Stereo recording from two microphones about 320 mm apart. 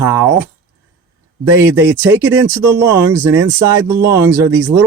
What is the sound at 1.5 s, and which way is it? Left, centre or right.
Speech, centre.